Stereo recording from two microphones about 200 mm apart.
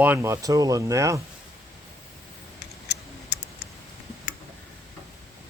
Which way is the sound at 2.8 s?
55° left (ahead or behind).